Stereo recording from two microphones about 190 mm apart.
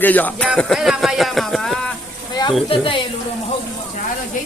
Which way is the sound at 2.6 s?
25° left (ahead or behind).